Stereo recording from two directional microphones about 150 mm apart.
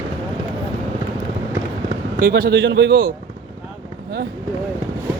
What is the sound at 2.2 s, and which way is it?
Speech, 80° right.